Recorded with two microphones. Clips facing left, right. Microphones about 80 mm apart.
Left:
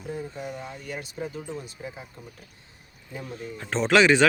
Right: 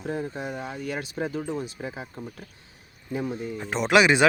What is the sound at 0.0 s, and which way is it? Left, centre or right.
Speech, right.